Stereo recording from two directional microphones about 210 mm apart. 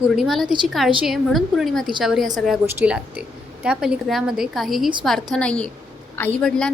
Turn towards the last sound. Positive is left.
turn(degrees=5)  # may be behind; listen again after turning